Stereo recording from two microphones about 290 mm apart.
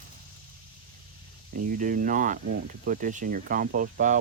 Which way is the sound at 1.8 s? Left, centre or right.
Right.